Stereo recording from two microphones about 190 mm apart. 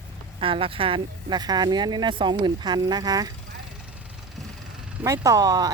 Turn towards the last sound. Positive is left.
turn(degrees=-20)  # may be behind; listen again after turning